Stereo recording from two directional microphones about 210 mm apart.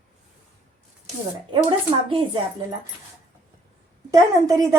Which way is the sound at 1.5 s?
25° right (ahead or behind).